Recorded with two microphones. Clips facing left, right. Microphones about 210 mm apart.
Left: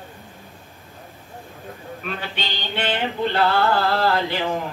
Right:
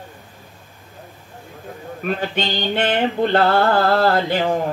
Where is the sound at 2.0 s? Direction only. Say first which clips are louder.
Right 9 dB; 50° right (ahead or behind).